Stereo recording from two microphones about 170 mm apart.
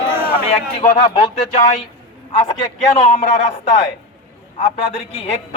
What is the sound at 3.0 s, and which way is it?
Speech, 35° left (ahead or behind).